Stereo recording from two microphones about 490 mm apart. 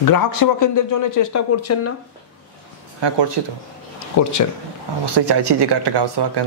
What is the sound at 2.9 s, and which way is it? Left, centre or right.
Speech, right.